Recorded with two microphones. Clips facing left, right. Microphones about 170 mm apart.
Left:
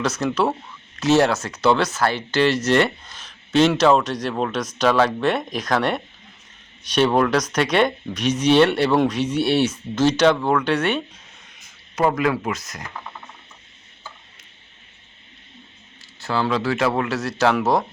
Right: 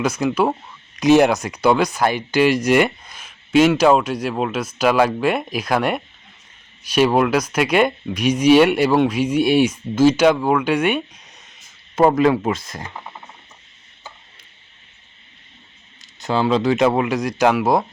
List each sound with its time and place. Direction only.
0.0 s speech: 10° right (ahead or behind)
11.9 s speech: 30° right (ahead or behind)
16.2 s speech: 20° right (ahead or behind)